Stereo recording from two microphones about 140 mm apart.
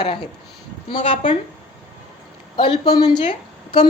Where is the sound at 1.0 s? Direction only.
60° left (ahead or behind).